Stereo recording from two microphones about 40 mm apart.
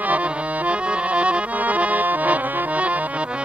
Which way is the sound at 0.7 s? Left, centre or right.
Right.